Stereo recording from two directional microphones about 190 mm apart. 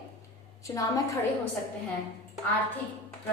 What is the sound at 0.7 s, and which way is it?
Speech, 20° left (ahead or behind).